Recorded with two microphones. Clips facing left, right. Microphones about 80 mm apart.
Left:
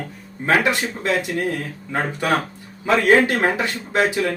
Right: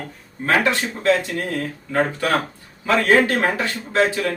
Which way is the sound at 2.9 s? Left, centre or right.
Centre.